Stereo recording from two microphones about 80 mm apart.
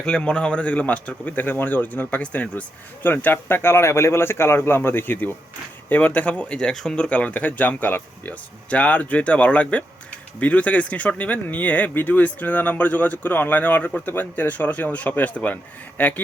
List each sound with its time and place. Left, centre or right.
0.0 s a man's voice: centre